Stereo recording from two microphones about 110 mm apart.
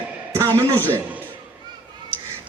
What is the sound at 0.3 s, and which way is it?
Speech, 25° right (ahead or behind).